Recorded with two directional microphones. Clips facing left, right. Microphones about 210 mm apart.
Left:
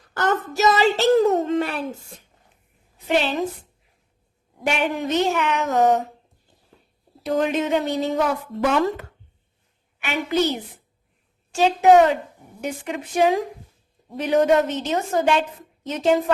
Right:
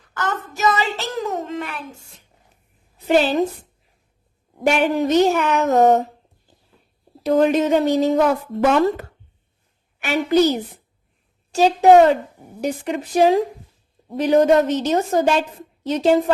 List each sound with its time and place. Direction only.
0.5 s child singing: 35° left (ahead or behind)
1.2 s a sound: 35° left (ahead or behind)
3.1 s a woman's voice: 40° right (ahead or behind)
4.6 s a woman's voice: 40° right (ahead or behind)
7.3 s a woman's voice: 40° right (ahead or behind)
10.0 s a woman's voice: 40° right (ahead or behind)